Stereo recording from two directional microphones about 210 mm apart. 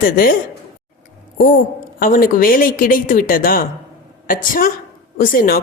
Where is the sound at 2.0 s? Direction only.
40° left (ahead or behind).